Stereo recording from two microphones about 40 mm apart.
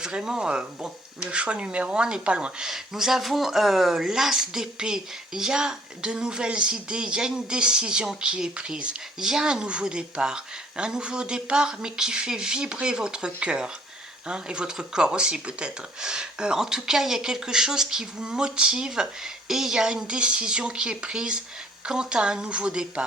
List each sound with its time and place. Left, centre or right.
0.0 s speech: centre
2.6 s speech: centre
20.1 s speech: right